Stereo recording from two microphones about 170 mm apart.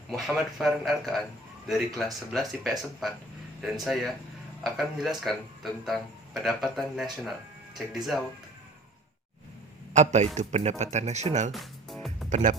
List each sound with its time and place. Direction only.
0.1 s speech: centre (ahead or behind)
9.9 s speech: 45° right (ahead or behind)
11.5 s music: centre (ahead or behind)
12.3 s speech: 45° right (ahead or behind)